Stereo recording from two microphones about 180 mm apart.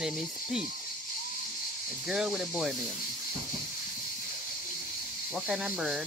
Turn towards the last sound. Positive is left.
turn(degrees=0)  # may be behind; listen again after turning